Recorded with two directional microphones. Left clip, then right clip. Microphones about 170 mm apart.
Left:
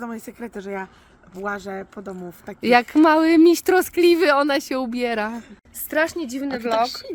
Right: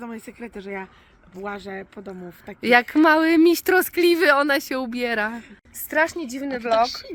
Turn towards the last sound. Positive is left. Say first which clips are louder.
# left 1 dB
turn(degrees=70)  # may be behind; listen again after turning